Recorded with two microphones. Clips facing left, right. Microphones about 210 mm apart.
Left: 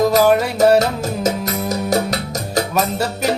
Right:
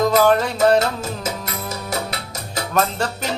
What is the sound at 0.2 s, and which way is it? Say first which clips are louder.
Music: left 2 dB; 10° left (ahead or behind).